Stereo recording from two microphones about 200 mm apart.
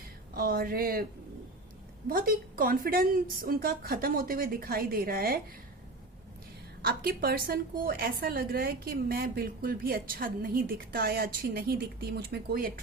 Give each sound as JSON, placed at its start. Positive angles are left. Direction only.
{"t": 0.3, "sound": "a woman's voice", "side_deg": -45}
{"t": 2.0, "sound": "a woman's voice", "side_deg": -45}
{"t": 6.8, "sound": "a woman's voice", "side_deg": -45}